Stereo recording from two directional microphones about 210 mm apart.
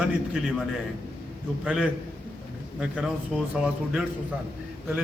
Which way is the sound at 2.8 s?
5° right (ahead or behind).